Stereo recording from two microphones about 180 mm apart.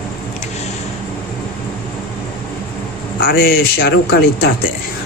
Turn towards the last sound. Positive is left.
turn(degrees=65)  # may be behind; listen again after turning